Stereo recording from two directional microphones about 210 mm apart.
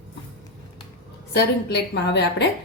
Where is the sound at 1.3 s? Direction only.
50° left (ahead or behind).